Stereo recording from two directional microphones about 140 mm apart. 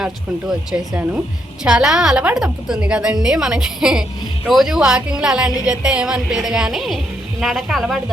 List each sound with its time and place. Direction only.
0.0 s a woman's voice: 5° right (ahead or behind)